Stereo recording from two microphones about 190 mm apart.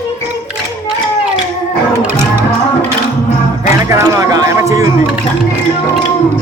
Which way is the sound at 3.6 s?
15° right (ahead or behind).